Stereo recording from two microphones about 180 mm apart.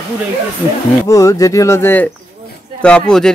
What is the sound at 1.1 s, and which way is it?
Speech, 20° left (ahead or behind).